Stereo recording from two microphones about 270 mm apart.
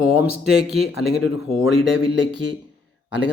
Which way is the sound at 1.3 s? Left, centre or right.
Right.